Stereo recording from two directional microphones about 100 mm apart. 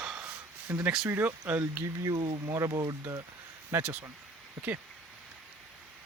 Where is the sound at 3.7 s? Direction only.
20° right (ahead or behind).